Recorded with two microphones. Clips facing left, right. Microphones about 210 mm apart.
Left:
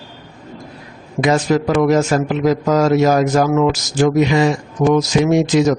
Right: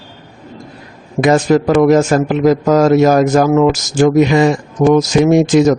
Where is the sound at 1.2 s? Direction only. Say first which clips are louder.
Right 4 dB; 50° right (ahead or behind).